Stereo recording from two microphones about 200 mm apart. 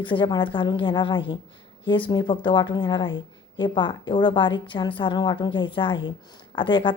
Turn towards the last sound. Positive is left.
turn(degrees=25)  # may be behind; listen again after turning